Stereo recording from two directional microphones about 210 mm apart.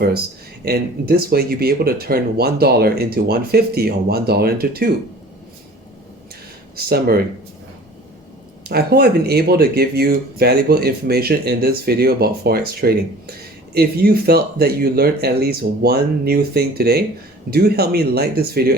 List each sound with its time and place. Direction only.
0.6 s speech: 50° right (ahead or behind)
6.7 s speech: 45° right (ahead or behind)
8.6 s speech: 50° right (ahead or behind)